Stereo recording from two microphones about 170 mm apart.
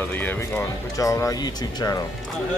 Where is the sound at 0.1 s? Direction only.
10° left (ahead or behind).